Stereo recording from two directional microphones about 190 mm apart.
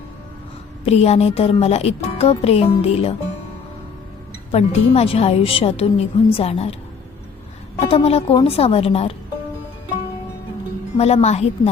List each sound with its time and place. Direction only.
0.9 s speech: 35° left (ahead or behind)
4.5 s speech: 35° left (ahead or behind)
7.9 s speech: 30° left (ahead or behind)
10.9 s speech: 35° left (ahead or behind)